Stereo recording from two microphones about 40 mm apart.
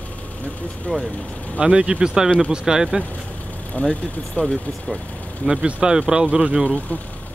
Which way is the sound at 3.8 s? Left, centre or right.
Left.